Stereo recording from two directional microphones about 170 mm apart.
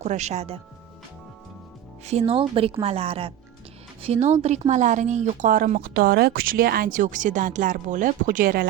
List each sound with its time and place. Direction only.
0.0 s speech: 40° right (ahead or behind)
2.0 s speech: 35° right (ahead or behind); by 8.6 s 55° right (ahead or behind)